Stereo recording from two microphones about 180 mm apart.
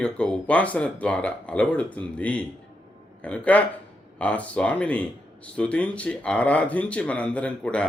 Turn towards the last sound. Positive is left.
turn(degrees=5)  # may be behind; listen again after turning